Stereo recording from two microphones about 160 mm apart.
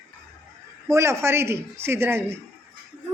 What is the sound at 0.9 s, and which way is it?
Speech, 15° right (ahead or behind).